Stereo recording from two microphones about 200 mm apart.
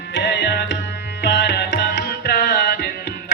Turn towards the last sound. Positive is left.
turn(degrees=50)  # may be behind; listen again after turning